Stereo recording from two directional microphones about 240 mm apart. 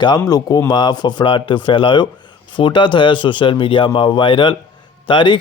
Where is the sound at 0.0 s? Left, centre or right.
Centre.